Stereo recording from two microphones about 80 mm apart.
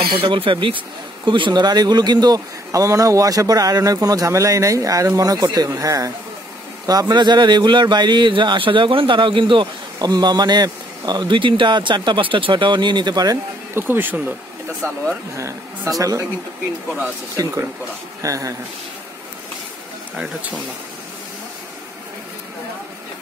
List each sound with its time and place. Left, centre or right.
0.1 s speech: right
6.9 s speech: right
10.0 s speech: right
13.7 s speech: right
15.3 s speech: right
18.2 s speech: right